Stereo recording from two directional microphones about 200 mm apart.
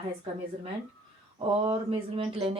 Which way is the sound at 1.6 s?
30° right (ahead or behind).